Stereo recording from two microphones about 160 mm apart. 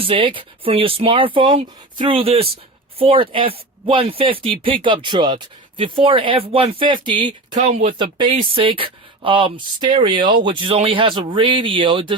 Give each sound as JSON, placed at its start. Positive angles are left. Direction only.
{"t": 0.0, "sound": "speech", "side_deg": -35}
{"t": 7.6, "sound": "speech", "side_deg": -45}